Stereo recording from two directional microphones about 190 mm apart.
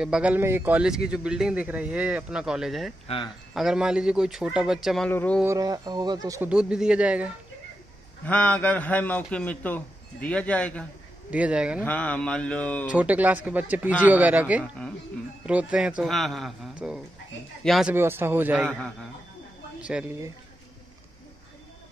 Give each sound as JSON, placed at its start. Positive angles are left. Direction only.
{"t": 0.0, "sound": "speech", "side_deg": -5}
{"t": 3.1, "sound": "speech", "side_deg": 30}
{"t": 3.5, "sound": "a man's voice", "side_deg": -5}
{"t": 5.4, "sound": "speech", "side_deg": -15}
{"t": 6.5, "sound": "speech", "side_deg": -5}
{"t": 8.3, "sound": "a man's voice", "side_deg": 10}
{"t": 11.2, "sound": "speech", "side_deg": -5}
{"t": 11.8, "sound": "a man's voice", "side_deg": 10}
{"t": 12.8, "sound": "speech", "side_deg": -5}
{"t": 14.6, "sound": "speech", "side_deg": 5}
{"t": 15.4, "sound": "speech", "side_deg": -5}
{"t": 17.9, "sound": "speech", "side_deg": -10}
{"t": 18.7, "sound": "a man's voice", "side_deg": 5}
{"t": 19.8, "sound": "a woman's voice", "side_deg": -5}